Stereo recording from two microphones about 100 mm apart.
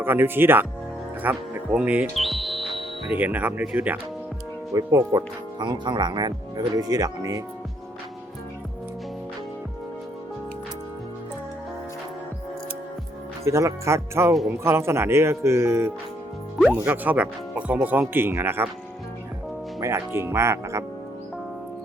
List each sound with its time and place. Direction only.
0.0 s speech: 20° right (ahead or behind)
2.1 s music: centre (ahead or behind)
3.2 s speech: 15° right (ahead or behind)
4.7 s speech: 35° right (ahead or behind)
5.5 s speech: 50° right (ahead or behind)
13.4 s speech: 30° right (ahead or behind)
16.6 s speech: 15° right (ahead or behind)
19.8 s speech: 25° right (ahead or behind)